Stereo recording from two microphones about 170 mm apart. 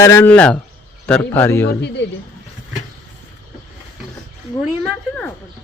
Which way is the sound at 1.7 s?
90° left.